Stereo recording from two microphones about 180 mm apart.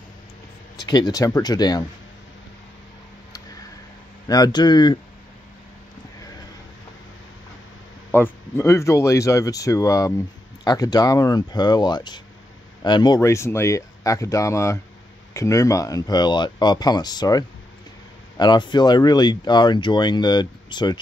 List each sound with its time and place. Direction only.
0.7 s speech: 25° left (ahead or behind)
4.3 s speech: 20° left (ahead or behind)
8.1 s speech: 10° left (ahead or behind)